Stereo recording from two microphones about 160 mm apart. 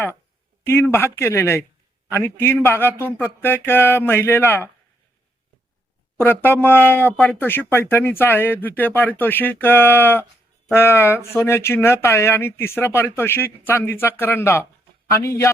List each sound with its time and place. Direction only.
0.6 s speech: 15° left (ahead or behind)
6.1 s speech: 15° left (ahead or behind)